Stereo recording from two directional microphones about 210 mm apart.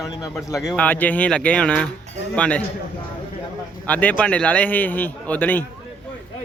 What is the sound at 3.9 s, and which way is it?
A man's voice, 5° left (ahead or behind).